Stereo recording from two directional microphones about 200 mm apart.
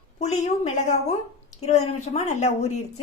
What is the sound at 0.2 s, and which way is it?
A woman's voice, 35° left (ahead or behind).